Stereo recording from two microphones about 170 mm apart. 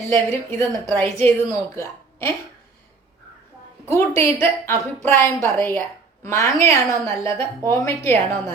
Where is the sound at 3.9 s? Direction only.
15° left (ahead or behind).